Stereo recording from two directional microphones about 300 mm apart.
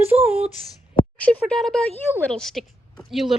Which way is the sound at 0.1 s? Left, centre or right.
Centre.